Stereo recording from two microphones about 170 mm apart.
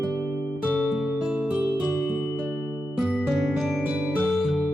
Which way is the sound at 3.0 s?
Centre (ahead or behind).